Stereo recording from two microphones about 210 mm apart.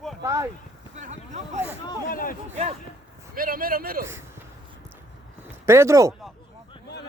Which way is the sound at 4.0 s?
10° right (ahead or behind).